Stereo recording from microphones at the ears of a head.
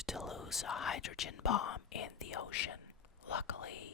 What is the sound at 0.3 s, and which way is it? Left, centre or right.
Speech, left.